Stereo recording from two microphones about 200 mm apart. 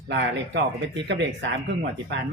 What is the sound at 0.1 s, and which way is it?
Speech, 60° right (ahead or behind).